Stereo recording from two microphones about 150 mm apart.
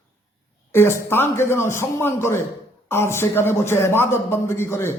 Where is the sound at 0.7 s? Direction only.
15° left (ahead or behind).